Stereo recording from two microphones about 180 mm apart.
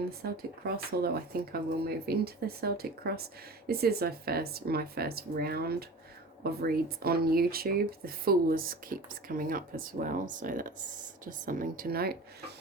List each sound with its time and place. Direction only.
0.9 s speech: 55° right (ahead or behind)